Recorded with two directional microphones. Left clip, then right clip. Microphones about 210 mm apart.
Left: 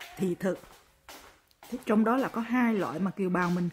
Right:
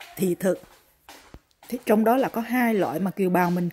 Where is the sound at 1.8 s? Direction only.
20° right (ahead or behind).